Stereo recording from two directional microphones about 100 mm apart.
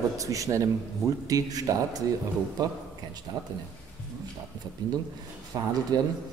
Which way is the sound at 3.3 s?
40° right (ahead or behind).